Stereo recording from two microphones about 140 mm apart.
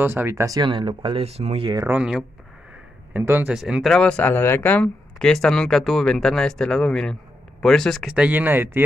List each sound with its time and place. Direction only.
0.0 s speech: 15° right (ahead or behind); by 1.7 s 45° right (ahead or behind)
1.9 s speech: 5° right (ahead or behind)
3.5 s speech: 5° right (ahead or behind)